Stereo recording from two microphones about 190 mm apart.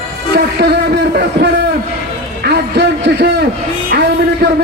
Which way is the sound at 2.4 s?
60° right (ahead or behind).